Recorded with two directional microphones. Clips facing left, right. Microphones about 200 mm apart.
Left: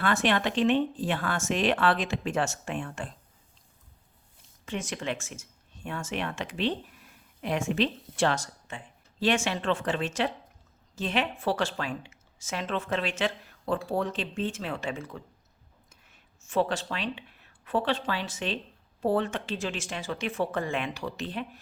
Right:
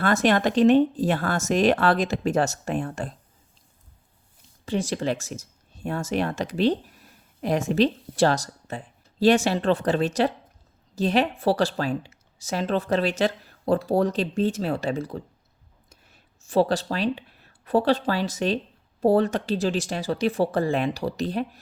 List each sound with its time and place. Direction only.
0.0 s a woman's voice: 40° right (ahead or behind)
4.6 s a woman's voice: 35° right (ahead or behind)